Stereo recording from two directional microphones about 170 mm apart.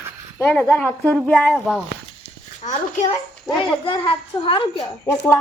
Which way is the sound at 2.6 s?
40° left (ahead or behind).